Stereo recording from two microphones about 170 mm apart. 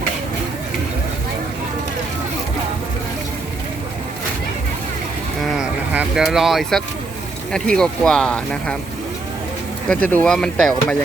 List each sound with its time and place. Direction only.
5.5 s a sound: 5° right (ahead or behind)
7.5 s speech: 5° left (ahead or behind)
9.9 s speech: 10° left (ahead or behind)